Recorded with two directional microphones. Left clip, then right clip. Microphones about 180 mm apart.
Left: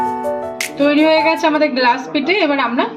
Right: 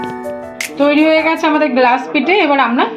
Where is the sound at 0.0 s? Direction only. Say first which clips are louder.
Left 4 dB; centre (ahead or behind).